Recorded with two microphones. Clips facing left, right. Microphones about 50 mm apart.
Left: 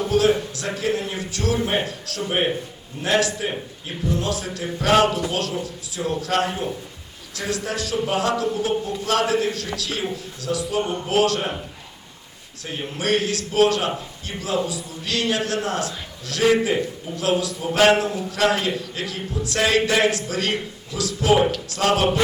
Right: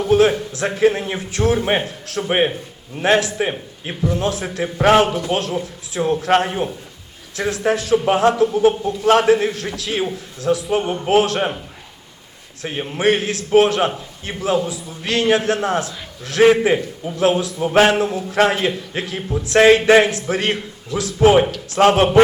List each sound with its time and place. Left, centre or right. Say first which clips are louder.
0.1 s a man's voice: right 5 dB; right
12.6 s a man's voice: right 7 dB; right